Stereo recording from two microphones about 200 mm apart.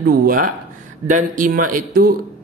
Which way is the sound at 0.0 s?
45° right (ahead or behind).